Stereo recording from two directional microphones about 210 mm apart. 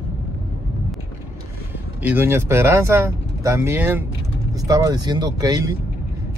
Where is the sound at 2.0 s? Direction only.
10° right (ahead or behind).